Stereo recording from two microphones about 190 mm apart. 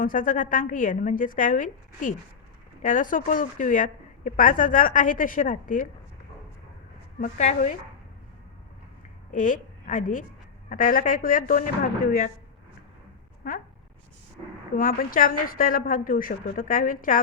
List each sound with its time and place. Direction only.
0.0 s a woman's voice: 45° left (ahead or behind)
7.2 s a woman's voice: 40° left (ahead or behind)
9.3 s a woman's voice: 45° left (ahead or behind)
13.4 s a woman's voice: 45° left (ahead or behind)
14.8 s a woman's voice: 45° left (ahead or behind)